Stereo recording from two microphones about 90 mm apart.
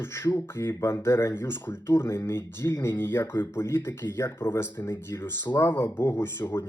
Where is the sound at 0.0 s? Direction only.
30° left (ahead or behind).